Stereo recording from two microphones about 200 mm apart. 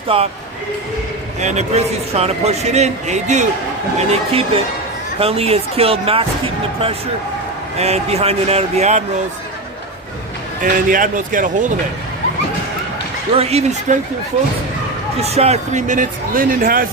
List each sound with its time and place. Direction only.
0.1 s speech: 25° right (ahead or behind)
1.4 s a man's voice: 35° right (ahead or behind)
10.6 s a man's voice: 40° right (ahead or behind)
13.3 s a man's voice: 30° right (ahead or behind)
15.2 s a man's voice: 30° right (ahead or behind)